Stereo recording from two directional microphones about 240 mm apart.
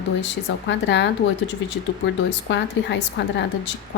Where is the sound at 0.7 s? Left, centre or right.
Left.